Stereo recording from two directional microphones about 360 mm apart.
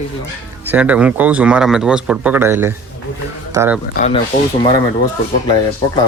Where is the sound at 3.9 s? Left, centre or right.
Centre.